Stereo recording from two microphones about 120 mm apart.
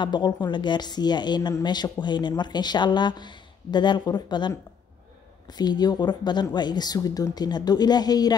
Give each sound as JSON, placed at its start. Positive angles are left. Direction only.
{"t": 0.0, "sound": "speech", "side_deg": 40}